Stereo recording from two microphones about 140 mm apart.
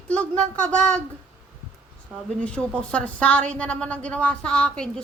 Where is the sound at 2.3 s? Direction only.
5° left (ahead or behind).